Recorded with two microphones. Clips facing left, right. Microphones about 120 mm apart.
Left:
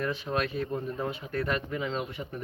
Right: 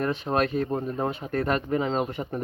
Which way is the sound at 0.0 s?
45° right (ahead or behind).